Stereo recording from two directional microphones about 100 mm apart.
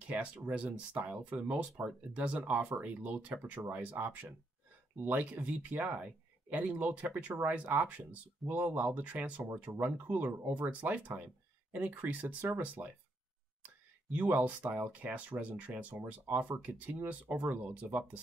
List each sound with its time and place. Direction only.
0.0 s speech: 10° right (ahead or behind)
14.1 s speech: 15° right (ahead or behind)